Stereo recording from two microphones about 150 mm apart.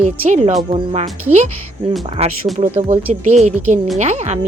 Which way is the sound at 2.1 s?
45° right (ahead or behind).